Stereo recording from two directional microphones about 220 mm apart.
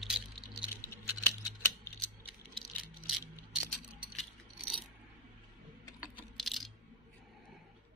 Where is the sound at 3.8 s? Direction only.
Centre (ahead or behind).